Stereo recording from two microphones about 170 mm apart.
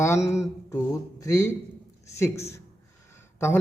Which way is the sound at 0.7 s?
20° left (ahead or behind).